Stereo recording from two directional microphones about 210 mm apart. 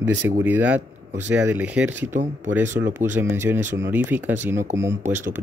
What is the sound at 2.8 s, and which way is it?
Speech, 10° right (ahead or behind).